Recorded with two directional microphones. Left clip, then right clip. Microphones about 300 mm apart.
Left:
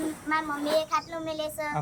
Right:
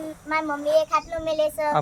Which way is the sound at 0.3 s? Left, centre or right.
Right.